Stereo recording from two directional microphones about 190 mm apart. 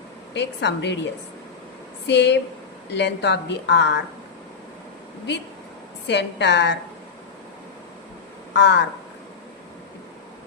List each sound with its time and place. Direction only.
0.3 s a woman's voice: 65° left (ahead or behind)
2.0 s a woman's voice: 65° left (ahead or behind)
6.1 s a woman's voice: 65° left (ahead or behind)
8.5 s a woman's voice: 65° left (ahead or behind)